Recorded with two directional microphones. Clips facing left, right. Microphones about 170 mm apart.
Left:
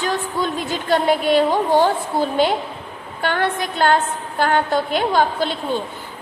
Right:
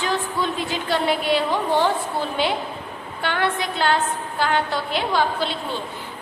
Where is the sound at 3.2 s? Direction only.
45° left (ahead or behind).